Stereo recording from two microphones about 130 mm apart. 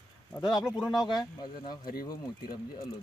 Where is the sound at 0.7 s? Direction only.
Centre (ahead or behind).